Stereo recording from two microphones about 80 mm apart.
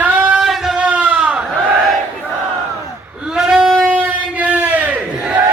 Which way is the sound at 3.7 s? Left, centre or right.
Centre.